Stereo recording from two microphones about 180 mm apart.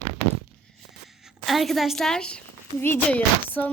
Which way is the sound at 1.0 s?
Centre (ahead or behind).